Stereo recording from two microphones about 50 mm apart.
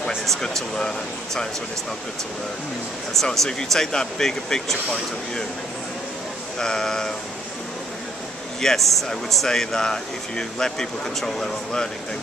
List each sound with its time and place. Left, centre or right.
0.3 s speech: centre
3.3 s speech: centre
6.6 s speech: centre
8.5 s speech: centre